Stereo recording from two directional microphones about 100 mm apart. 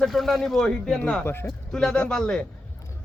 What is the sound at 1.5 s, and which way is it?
Speech, 5° left (ahead or behind).